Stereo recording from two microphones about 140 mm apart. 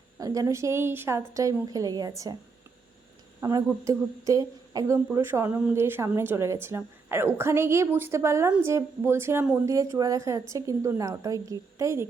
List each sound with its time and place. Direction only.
0.2 s a woman's voice: 25° right (ahead or behind)
3.5 s a woman's voice: 25° right (ahead or behind)